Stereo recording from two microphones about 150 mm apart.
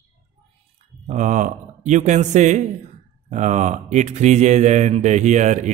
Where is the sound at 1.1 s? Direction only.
55° right (ahead or behind).